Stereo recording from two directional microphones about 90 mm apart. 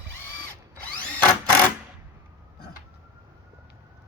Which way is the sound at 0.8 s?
15° left (ahead or behind).